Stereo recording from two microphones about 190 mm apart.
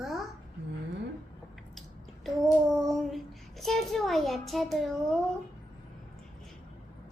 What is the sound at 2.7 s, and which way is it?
A child's voice, centre (ahead or behind).